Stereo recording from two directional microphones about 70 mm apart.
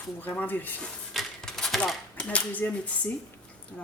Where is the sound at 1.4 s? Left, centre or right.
Centre.